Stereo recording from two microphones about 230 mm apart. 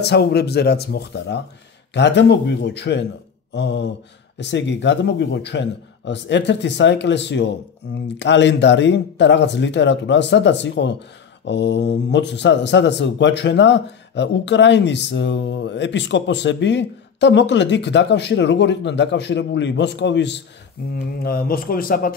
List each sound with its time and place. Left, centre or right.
0.0 s speech: left